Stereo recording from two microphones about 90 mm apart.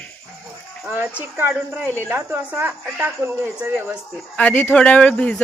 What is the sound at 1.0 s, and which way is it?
Speech, 15° right (ahead or behind).